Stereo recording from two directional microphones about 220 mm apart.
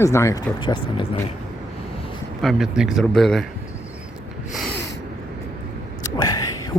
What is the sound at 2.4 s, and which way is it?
Speech, centre (ahead or behind).